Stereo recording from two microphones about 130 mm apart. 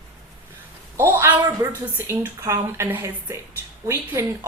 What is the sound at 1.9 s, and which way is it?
A woman's voice, 20° right (ahead or behind).